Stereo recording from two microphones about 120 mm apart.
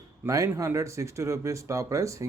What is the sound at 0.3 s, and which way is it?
Speech, 25° right (ahead or behind).